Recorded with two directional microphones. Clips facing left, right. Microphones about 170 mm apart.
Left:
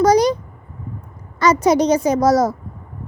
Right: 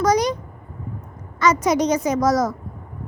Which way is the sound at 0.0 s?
30° left (ahead or behind).